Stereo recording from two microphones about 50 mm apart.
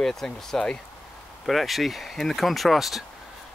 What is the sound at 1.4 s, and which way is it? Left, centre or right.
Speech, centre.